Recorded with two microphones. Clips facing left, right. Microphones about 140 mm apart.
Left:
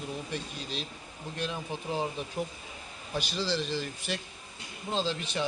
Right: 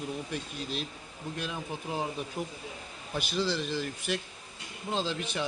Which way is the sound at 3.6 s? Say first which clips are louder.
Even; 10° right (ahead or behind).